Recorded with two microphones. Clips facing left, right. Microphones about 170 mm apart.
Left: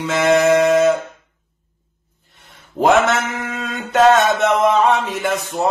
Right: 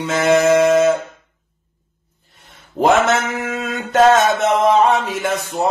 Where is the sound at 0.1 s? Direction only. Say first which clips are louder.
Even; centre (ahead or behind).